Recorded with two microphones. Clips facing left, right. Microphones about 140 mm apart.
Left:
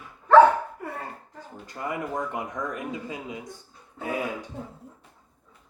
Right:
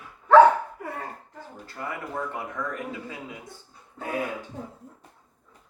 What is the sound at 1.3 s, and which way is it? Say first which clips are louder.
Speech: left 2 dB; 15° left (ahead or behind).